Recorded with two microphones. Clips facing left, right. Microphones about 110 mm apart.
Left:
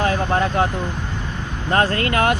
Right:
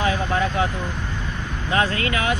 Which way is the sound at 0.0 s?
50° left (ahead or behind).